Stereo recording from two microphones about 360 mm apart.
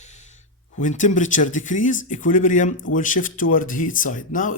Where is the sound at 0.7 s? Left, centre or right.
Left.